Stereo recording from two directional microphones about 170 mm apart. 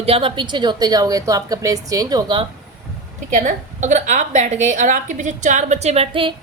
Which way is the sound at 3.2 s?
45° right (ahead or behind).